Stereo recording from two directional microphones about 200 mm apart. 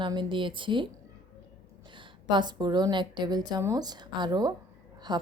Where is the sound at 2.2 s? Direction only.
20° right (ahead or behind).